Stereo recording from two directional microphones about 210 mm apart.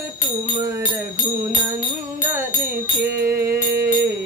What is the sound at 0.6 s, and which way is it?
Music, 20° right (ahead or behind).